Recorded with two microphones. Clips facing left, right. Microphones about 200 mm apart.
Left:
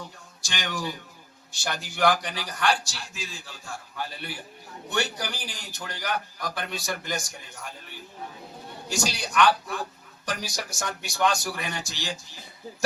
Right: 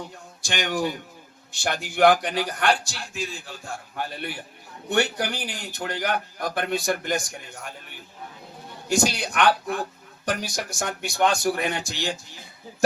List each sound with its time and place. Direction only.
0.4 s a man's voice: 55° right (ahead or behind)
8.9 s a man's voice: 55° right (ahead or behind)